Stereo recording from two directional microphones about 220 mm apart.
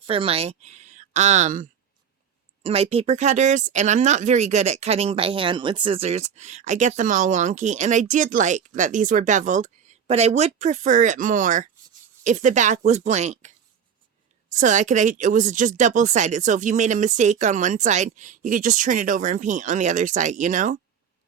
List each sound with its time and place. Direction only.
0.1 s speech: 25° right (ahead or behind)
2.6 s speech: 25° right (ahead or behind)
14.6 s speech: 35° right (ahead or behind)